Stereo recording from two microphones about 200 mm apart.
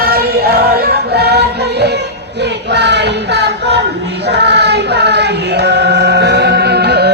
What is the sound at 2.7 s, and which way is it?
Child singing, 60° right (ahead or behind).